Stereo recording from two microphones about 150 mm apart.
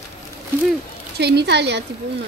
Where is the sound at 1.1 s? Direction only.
90° right.